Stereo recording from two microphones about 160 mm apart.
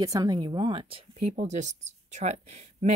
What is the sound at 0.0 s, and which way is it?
Speech, 25° right (ahead or behind).